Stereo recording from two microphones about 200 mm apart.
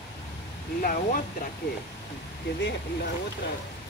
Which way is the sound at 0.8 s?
45° left (ahead or behind).